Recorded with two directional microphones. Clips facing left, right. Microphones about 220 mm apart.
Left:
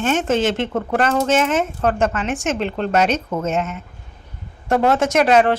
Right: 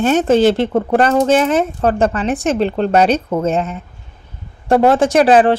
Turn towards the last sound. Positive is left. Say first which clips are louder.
# right 4 dB
turn(degrees=-30)  # may be behind; listen again after turning